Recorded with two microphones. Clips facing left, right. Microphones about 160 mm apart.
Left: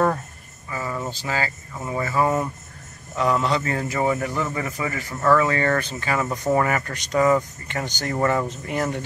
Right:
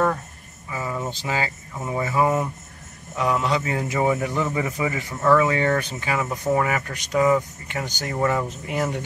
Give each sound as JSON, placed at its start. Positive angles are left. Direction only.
{"t": 0.7, "sound": "a sound", "side_deg": -15}
{"t": 1.1, "sound": "speech", "side_deg": -15}
{"t": 5.1, "sound": "speech", "side_deg": 0}
{"t": 5.4, "sound": "speech", "side_deg": -15}